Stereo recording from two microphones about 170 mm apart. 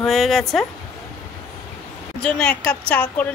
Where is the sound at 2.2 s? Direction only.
5° left (ahead or behind).